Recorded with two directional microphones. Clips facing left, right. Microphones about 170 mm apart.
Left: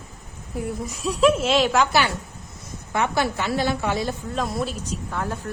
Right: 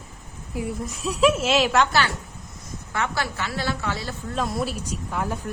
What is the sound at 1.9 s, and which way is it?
A woman's voice, 15° left (ahead or behind).